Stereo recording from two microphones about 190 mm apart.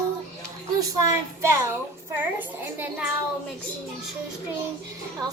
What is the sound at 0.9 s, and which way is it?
A woman's voice, 15° right (ahead or behind).